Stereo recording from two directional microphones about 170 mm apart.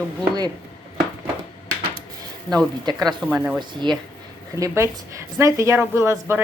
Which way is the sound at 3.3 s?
10° right (ahead or behind).